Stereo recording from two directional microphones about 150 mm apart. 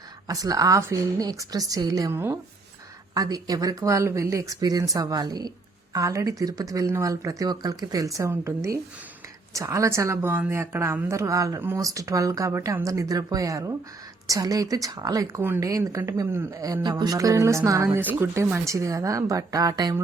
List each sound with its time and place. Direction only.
0.3 s speech: 25° right (ahead or behind)